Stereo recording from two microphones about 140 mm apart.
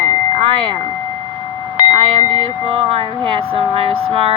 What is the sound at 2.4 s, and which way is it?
Speech, 40° right (ahead or behind).